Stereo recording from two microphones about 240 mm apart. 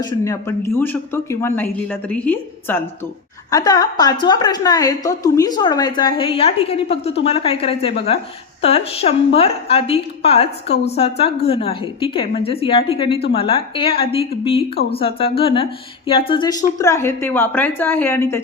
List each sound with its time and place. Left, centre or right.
0.0 s a woman's voice: centre